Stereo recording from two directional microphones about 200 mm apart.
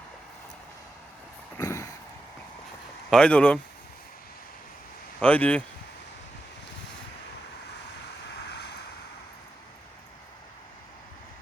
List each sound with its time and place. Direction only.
1.5 s a sound: 15° left (ahead or behind)
3.1 s speech: 5° left (ahead or behind)
5.2 s speech: 10° left (ahead or behind)
8.3 s vehicle: 55° left (ahead or behind)